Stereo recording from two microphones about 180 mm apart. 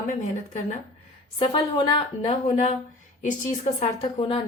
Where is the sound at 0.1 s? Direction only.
40° left (ahead or behind).